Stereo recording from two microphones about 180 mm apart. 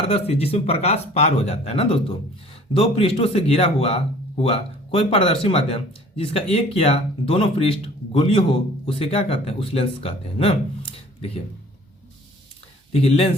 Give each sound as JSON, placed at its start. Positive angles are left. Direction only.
{"t": 0.1, "sound": "a man's voice", "side_deg": 35}
{"t": 12.9, "sound": "a man's voice", "side_deg": 35}